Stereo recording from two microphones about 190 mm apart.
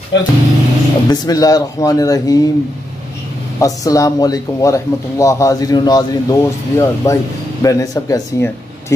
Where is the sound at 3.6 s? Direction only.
20° left (ahead or behind).